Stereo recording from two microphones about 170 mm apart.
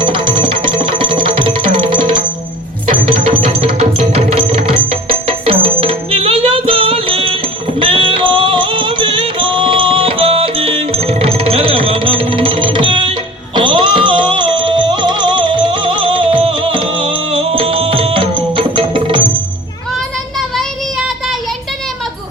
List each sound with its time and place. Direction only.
0.0 s music: 30° right (ahead or behind)
2.9 s music: 35° right (ahead or behind)